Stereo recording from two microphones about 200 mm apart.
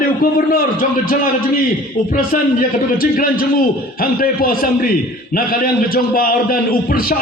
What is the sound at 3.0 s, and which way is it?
A man's voice, 45° left (ahead or behind).